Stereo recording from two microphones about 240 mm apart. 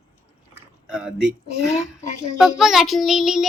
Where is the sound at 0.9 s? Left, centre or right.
Centre.